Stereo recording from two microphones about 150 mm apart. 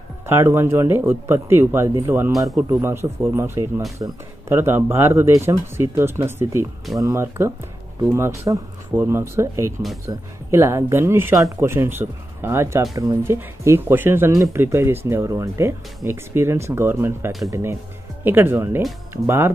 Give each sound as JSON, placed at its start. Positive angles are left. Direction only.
{"t": 0.3, "sound": "speech", "side_deg": -15}
{"t": 2.3, "sound": "speech", "side_deg": 0}
{"t": 2.7, "sound": "speech", "side_deg": -15}